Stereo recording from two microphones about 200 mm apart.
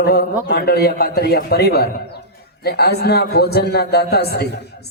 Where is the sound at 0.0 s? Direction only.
50° left (ahead or behind).